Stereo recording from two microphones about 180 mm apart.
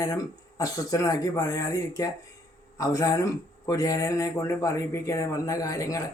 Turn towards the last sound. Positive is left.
turn(degrees=20)  # may be behind; listen again after turning